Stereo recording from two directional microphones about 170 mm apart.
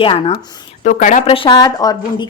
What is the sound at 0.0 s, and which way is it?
Speech, 30° left (ahead or behind).